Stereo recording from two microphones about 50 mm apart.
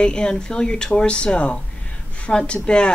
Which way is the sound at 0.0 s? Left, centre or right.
Centre.